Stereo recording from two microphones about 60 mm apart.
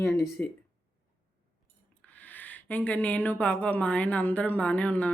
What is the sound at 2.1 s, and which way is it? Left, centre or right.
Speech, left.